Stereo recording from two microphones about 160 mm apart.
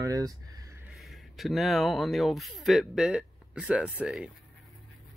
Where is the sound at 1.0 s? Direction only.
Centre (ahead or behind).